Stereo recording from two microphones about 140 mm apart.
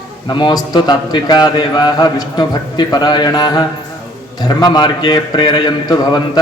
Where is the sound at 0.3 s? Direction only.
30° left (ahead or behind).